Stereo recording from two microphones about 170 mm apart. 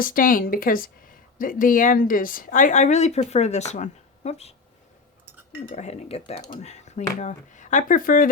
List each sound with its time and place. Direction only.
0.0 s speech: 55° left (ahead or behind); by 4.5 s 40° left (ahead or behind)
5.7 s speech: 40° left (ahead or behind)